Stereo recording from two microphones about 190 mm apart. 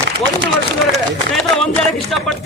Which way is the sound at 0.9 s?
Centre (ahead or behind).